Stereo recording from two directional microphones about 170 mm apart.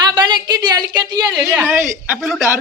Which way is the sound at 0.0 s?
25° right (ahead or behind).